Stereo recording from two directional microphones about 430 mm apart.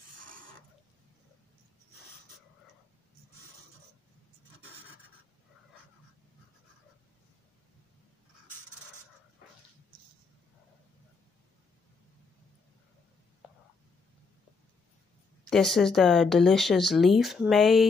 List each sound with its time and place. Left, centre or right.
13.4 s whispering: centre
15.5 s speech: centre